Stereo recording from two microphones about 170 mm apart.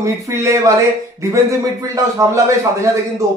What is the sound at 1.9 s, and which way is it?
A man's voice, 20° right (ahead or behind).